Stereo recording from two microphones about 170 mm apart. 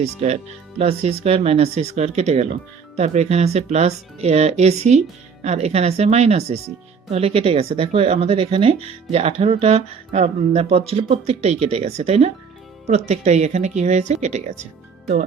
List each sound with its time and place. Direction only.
0.0 s speech: 40° right (ahead or behind)